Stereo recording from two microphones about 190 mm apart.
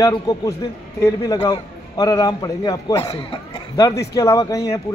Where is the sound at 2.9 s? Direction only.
30° left (ahead or behind).